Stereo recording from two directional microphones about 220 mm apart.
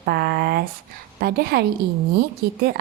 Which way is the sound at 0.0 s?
45° right (ahead or behind).